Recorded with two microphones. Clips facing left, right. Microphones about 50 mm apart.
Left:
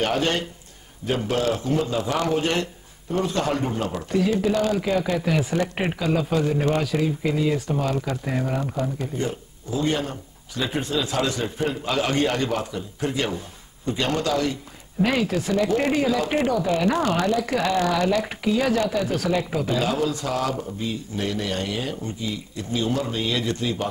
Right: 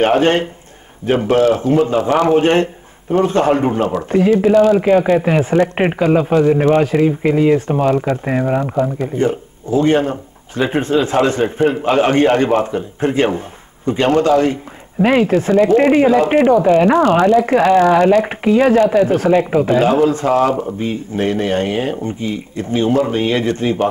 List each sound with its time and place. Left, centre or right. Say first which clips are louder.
0.0 s a man's voice: right 10 dB; right